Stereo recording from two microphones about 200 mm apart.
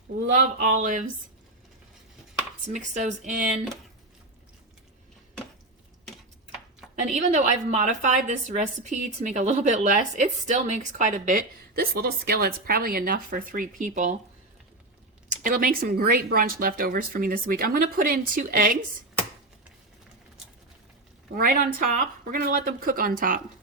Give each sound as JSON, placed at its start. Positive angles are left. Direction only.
{"t": 0.3, "sound": "a woman's voice", "side_deg": -40}
{"t": 2.6, "sound": "a woman's voice", "side_deg": -35}
{"t": 7.1, "sound": "a woman's voice", "side_deg": -35}
{"t": 15.3, "sound": "speech", "side_deg": -45}
{"t": 21.3, "sound": "speech", "side_deg": -45}